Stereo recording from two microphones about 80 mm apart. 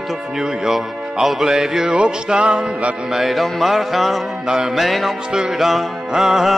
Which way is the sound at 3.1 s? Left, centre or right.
Centre.